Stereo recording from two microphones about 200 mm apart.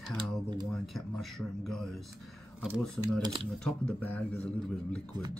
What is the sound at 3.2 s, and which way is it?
Speech, 25° right (ahead or behind).